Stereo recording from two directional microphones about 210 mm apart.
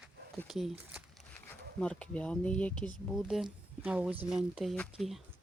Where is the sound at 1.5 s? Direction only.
5° left (ahead or behind).